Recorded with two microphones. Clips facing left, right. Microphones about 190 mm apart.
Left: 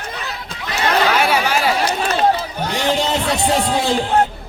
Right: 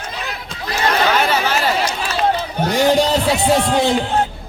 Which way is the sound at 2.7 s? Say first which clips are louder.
Right 5 dB; 40° right (ahead or behind).